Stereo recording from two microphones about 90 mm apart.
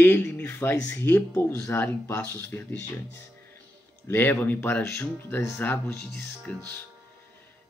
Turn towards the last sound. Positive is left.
turn(degrees=20)  # may be behind; listen again after turning